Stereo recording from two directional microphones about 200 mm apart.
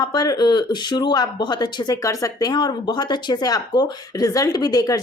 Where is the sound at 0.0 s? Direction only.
20° left (ahead or behind).